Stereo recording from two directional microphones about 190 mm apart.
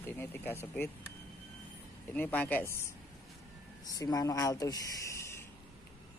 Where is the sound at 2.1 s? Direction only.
10° left (ahead or behind).